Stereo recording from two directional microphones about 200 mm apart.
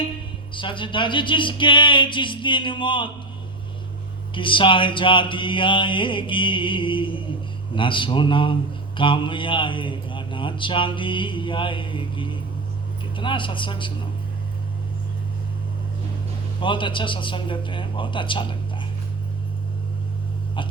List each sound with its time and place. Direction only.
0.5 s a man's voice: 25° left (ahead or behind)
4.4 s a man's voice: 25° left (ahead or behind)
16.6 s a man's voice: 25° left (ahead or behind)
20.6 s a man's voice: 25° left (ahead or behind)